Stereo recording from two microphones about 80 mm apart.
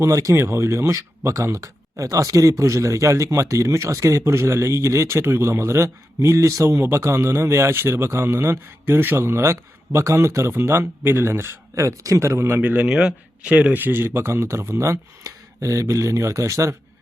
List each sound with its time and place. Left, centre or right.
0.0 s speech: right
12.9 s speech: centre; by 16.7 s right